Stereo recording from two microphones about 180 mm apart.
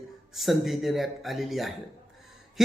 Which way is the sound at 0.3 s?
Centre (ahead or behind).